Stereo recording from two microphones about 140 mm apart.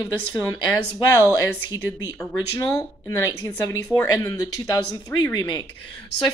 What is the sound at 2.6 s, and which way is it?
Speech, 20° left (ahead or behind).